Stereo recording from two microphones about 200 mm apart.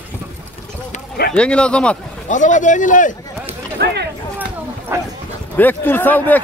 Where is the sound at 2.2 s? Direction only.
40° left (ahead or behind).